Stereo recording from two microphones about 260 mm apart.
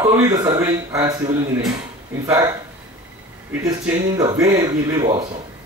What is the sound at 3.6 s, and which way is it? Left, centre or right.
A man's voice, centre.